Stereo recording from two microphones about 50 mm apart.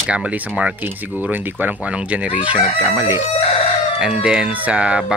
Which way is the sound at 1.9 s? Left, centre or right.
Right.